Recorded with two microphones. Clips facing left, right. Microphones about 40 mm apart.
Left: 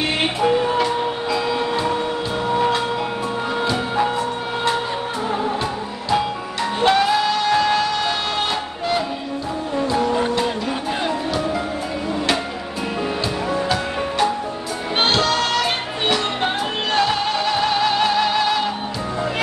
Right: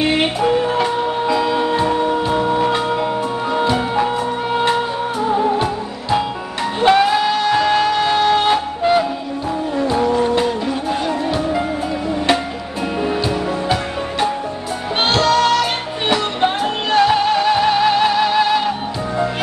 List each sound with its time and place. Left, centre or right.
0.1 s music: centre
5.4 s music: right
15.2 s music: centre
16.9 s music: centre